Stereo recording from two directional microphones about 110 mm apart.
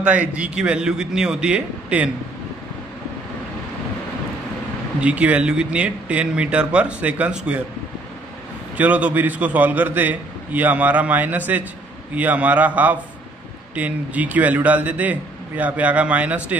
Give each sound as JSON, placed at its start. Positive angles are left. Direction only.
{"t": 0.0, "sound": "a man's voice", "side_deg": -10}
{"t": 5.0, "sound": "a man's voice", "side_deg": -10}
{"t": 8.7, "sound": "a man's voice", "side_deg": -15}